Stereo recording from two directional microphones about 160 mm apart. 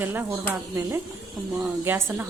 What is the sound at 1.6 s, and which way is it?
Speech, 15° right (ahead or behind).